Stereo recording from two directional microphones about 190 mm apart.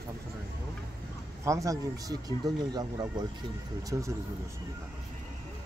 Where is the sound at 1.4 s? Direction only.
15° right (ahead or behind).